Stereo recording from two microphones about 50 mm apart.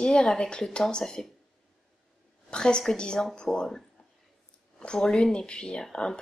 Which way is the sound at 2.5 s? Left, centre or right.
Centre.